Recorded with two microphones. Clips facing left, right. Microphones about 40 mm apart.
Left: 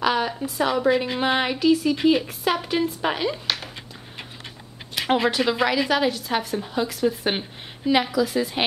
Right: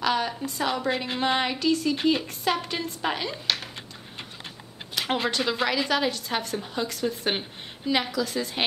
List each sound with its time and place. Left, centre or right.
0.0 s speech: centre
5.0 s speech: left
5.3 s a woman's voice: centre